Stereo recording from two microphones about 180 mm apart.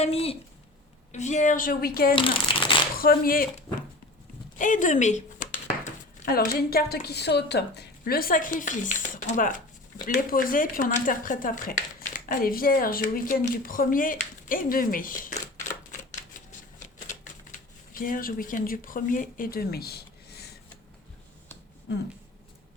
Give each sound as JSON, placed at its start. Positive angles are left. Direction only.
{"t": 0.0, "sound": "speech", "side_deg": 35}
{"t": 2.1, "sound": "speech", "side_deg": 30}
{"t": 2.9, "sound": "speech", "side_deg": 55}
{"t": 4.5, "sound": "speech", "side_deg": 45}
{"t": 17.5, "sound": "speech", "side_deg": 50}